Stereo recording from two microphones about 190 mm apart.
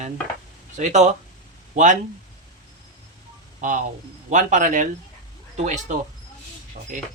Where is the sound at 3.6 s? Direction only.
40° right (ahead or behind).